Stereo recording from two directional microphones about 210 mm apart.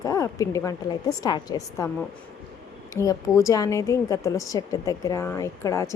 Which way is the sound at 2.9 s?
15° left (ahead or behind).